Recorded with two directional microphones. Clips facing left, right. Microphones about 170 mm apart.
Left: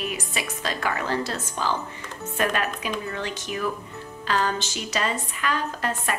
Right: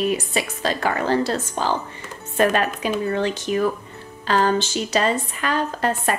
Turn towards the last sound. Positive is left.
turn(degrees=-35)  # may be behind; listen again after turning